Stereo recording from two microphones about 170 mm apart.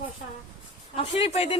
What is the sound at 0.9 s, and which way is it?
Speech, 35° left (ahead or behind).